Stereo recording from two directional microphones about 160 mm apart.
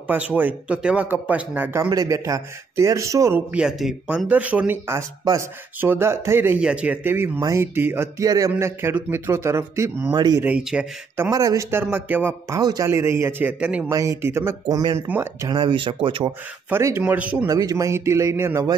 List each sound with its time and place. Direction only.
0.1 s speech: 10° right (ahead or behind)
10.1 s a man's voice: 25° right (ahead or behind)
10.4 s speech: 5° right (ahead or behind)
11.2 s speech: 20° right (ahead or behind)
12.5 s speech: 25° right (ahead or behind); by 13.8 s 5° right (ahead or behind)
13.8 s a man's voice: 20° right (ahead or behind)
15.4 s speech: 30° right (ahead or behind)
16.7 s speech: 15° right (ahead or behind)
17.5 s a man's voice: 25° right (ahead or behind)